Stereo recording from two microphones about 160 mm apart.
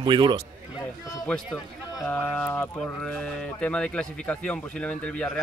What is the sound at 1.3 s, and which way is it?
Speech, 5° left (ahead or behind).